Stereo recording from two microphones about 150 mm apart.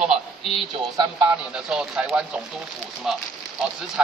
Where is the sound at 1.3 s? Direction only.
5° right (ahead or behind).